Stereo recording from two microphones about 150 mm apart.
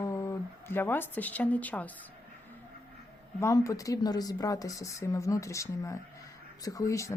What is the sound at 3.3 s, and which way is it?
Speech, 20° left (ahead or behind).